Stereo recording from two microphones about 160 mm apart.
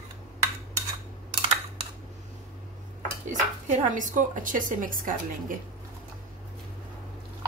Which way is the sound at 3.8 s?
55° right (ahead or behind).